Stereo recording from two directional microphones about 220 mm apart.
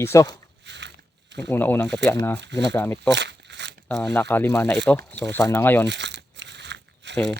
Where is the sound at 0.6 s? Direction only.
55° right (ahead or behind).